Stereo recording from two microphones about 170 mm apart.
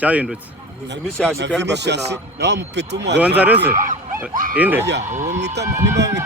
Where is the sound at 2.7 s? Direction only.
90° right.